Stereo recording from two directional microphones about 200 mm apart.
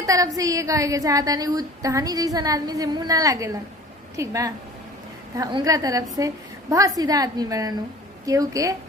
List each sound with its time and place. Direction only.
0.0 s a woman's voice: 15° right (ahead or behind)